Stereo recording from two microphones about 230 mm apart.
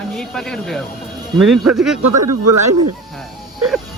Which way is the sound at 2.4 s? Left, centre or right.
Right.